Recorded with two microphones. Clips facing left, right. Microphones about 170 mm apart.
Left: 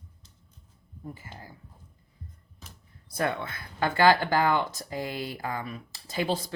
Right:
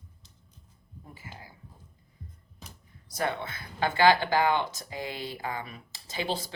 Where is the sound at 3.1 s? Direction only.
55° left (ahead or behind).